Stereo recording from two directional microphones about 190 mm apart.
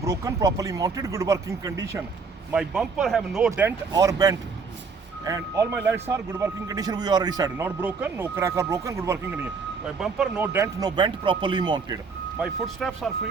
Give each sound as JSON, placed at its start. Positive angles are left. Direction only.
{"t": 0.0, "sound": "speech", "side_deg": -15}
{"t": 2.5, "sound": "speech", "side_deg": -5}
{"t": 9.8, "sound": "speech", "side_deg": -5}
{"t": 12.4, "sound": "speech", "side_deg": 0}